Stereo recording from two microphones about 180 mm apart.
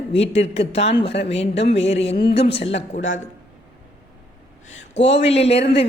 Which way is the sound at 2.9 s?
90° left.